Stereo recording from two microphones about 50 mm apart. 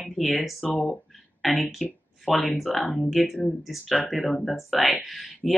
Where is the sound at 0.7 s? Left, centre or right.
Left.